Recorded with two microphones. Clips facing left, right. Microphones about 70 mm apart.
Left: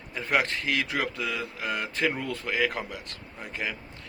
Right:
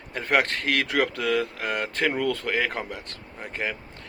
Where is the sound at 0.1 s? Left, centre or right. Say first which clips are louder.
Right 3 dB; right.